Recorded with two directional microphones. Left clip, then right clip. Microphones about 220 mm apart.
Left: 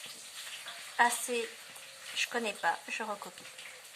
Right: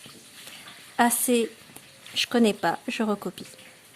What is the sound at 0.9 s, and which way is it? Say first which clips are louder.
Speech: right 6 dB; 45° right (ahead or behind).